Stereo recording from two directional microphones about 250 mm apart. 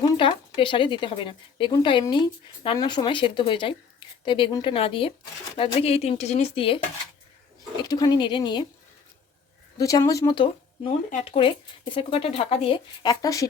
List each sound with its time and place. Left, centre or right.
0.0 s speech: centre
9.7 s speech: centre